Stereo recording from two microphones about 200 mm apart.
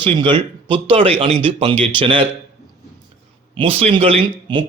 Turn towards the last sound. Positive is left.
turn(degrees=-25)  # may be behind; listen again after turning